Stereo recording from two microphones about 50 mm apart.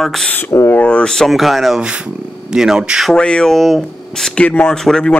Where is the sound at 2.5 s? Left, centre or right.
Centre.